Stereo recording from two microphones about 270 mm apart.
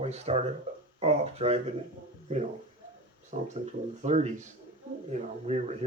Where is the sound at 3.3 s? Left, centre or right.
Right.